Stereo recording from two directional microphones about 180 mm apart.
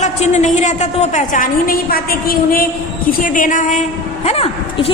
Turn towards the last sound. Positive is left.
turn(degrees=35)  # may be behind; listen again after turning